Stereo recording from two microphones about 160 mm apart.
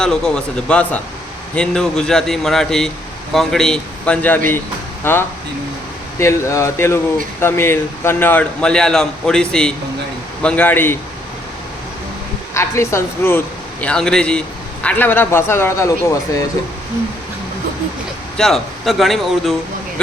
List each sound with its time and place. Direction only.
0.0 s a man's voice: 5° left (ahead or behind)
12.5 s a man's voice: 15° left (ahead or behind)
13.8 s a man's voice: 5° left (ahead or behind)
18.3 s speech: centre (ahead or behind)